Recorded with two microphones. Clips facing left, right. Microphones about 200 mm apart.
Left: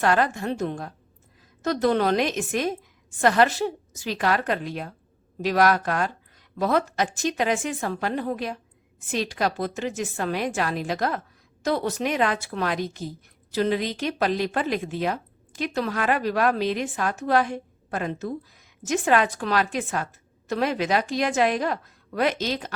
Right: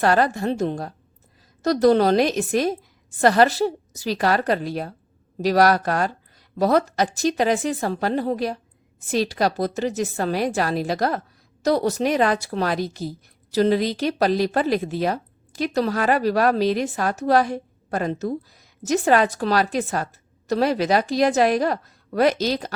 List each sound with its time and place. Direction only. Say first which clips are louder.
0.0 s a woman's voice: right 3 dB; 35° right (ahead or behind)